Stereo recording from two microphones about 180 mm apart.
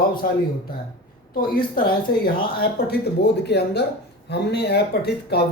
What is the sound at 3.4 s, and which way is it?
Speech, 65° left (ahead or behind).